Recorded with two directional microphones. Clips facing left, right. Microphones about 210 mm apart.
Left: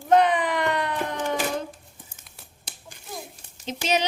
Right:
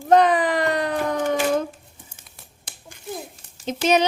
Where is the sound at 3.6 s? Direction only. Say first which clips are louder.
Right 6 dB; 50° right (ahead or behind).